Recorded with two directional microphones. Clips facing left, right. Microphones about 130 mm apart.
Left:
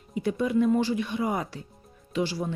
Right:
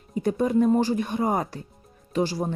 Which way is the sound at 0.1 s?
45° right (ahead or behind).